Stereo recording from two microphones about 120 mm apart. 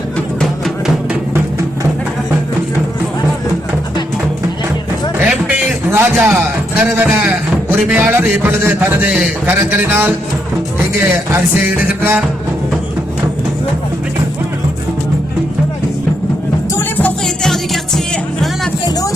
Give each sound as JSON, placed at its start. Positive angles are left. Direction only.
{"t": 5.2, "sound": "music", "side_deg": -10}
{"t": 11.1, "sound": "music", "side_deg": -15}
{"t": 17.2, "sound": "music", "side_deg": 5}
{"t": 18.9, "sound": "vehicle", "side_deg": 30}